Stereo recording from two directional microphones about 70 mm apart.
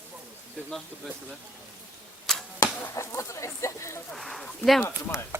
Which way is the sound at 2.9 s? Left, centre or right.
Left.